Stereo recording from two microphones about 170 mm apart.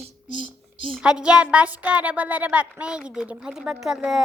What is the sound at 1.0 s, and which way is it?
A child's voice, 5° right (ahead or behind).